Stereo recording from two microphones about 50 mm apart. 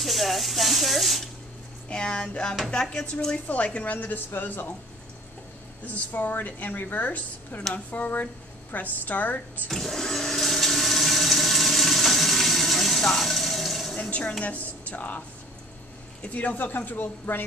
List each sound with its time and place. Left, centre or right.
0.0 s speech: centre
1.9 s speech: centre
3.4 s speech: left
6.1 s speech: left
9.7 s toilet flush: centre
14.4 s speech: left